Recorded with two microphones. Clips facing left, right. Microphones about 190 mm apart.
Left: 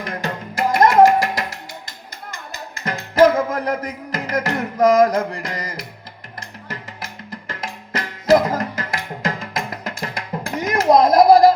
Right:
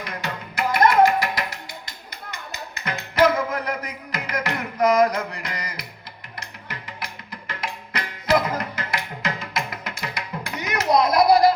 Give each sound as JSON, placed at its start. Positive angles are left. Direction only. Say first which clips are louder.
{"t": 0.0, "sound": "music", "louder": "left 5 dB", "side_deg": 45}
{"t": 2.8, "sound": "music", "louder": "left 5 dB", "side_deg": 45}